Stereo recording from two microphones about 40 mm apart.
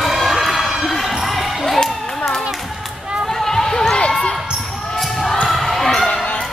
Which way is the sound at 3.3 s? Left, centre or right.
Centre.